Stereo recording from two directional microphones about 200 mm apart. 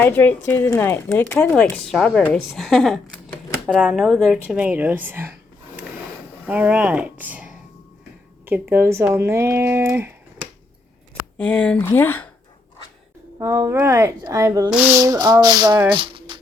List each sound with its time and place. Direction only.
0.0 s a woman's voice: 10° left (ahead or behind); by 5.3 s 10° right (ahead or behind)
6.4 s speech: 10° right (ahead or behind)
11.3 s a woman's voice: 5° left (ahead or behind)
13.4 s speech: 15° right (ahead or behind)
14.7 s a woman's voice: 5° right (ahead or behind)
14.9 s speech: 15° right (ahead or behind)